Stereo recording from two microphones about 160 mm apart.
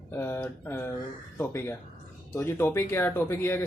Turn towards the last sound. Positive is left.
turn(degrees=15)  # may be behind; listen again after turning